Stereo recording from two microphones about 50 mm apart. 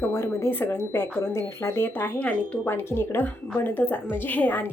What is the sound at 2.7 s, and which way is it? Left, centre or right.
Speech, left.